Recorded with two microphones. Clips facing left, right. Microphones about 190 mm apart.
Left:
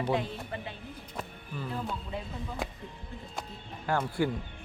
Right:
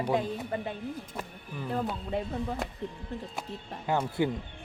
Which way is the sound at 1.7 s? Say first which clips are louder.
Right 6 dB; 60° right (ahead or behind).